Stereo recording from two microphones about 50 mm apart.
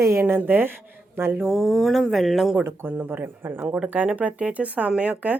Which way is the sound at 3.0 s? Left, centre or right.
Right.